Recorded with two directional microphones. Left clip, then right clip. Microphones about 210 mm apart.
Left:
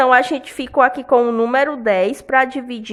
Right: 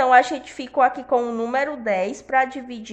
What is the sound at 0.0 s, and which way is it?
A woman's voice, 35° left (ahead or behind).